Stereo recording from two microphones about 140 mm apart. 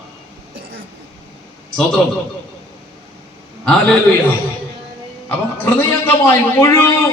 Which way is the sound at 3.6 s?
5° left (ahead or behind).